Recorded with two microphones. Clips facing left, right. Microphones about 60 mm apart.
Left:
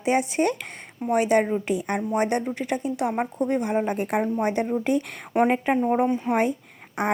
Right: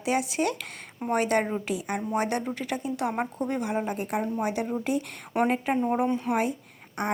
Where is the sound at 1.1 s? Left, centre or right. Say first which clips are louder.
Left 4 dB; centre.